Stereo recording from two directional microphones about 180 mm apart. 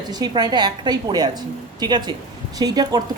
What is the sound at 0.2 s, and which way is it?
A woman's voice, 20° right (ahead or behind).